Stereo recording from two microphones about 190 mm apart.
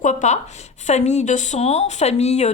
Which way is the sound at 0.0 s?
40° left (ahead or behind).